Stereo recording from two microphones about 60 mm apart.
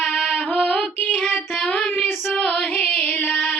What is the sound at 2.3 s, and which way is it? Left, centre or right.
Music, centre.